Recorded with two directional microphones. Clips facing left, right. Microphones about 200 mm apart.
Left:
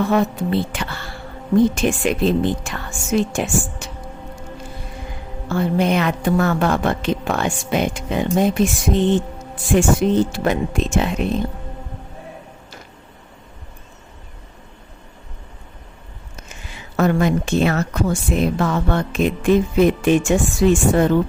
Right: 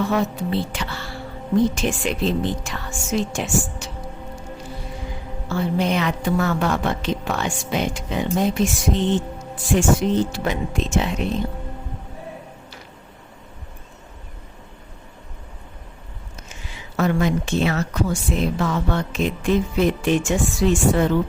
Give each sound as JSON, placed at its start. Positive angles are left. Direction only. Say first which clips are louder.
{"t": 0.0, "sound": "a woman's voice", "louder": "left 3 dB", "side_deg": 55}
{"t": 5.5, "sound": "a woman's voice", "louder": "left 3 dB", "side_deg": 55}
{"t": 17.0, "sound": "a woman's voice", "louder": "left 3 dB", "side_deg": 50}